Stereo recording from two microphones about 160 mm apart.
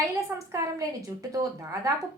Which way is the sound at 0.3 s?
20° right (ahead or behind).